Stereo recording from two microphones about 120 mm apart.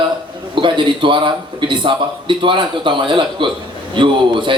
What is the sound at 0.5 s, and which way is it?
A man's voice, 45° right (ahead or behind).